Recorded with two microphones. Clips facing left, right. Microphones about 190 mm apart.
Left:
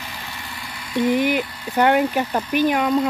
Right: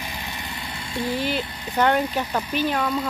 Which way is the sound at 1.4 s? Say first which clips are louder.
Left 3 dB; 20° right (ahead or behind).